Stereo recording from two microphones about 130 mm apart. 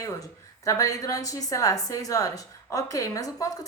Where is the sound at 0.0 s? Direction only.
25° left (ahead or behind).